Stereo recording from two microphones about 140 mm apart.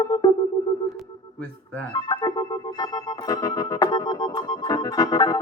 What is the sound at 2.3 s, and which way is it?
Music, 25° left (ahead or behind).